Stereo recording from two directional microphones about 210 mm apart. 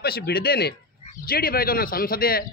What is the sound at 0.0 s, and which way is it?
A man's voice, 50° left (ahead or behind).